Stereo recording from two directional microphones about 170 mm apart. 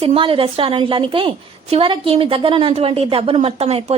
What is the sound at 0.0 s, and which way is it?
A woman's voice, 35° right (ahead or behind).